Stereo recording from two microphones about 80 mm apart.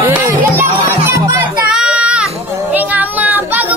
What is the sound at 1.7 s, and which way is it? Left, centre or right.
Baby cry, centre.